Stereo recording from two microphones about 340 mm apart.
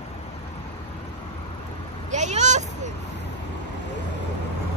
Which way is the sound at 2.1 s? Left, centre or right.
Right.